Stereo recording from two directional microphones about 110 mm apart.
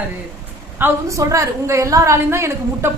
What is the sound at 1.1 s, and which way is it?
A woman's voice, 30° right (ahead or behind).